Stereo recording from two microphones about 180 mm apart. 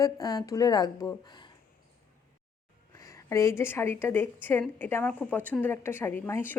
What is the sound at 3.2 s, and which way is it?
Speech, 15° left (ahead or behind).